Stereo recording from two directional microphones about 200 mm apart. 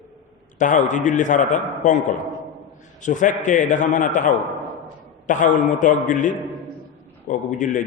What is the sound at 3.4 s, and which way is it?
A man's voice, 40° left (ahead or behind).